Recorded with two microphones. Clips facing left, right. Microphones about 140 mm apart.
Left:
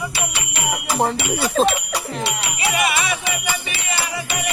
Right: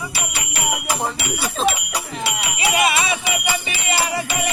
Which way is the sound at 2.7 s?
25° right (ahead or behind).